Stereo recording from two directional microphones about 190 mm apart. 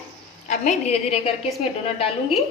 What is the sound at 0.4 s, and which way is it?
Speech, 35° left (ahead or behind).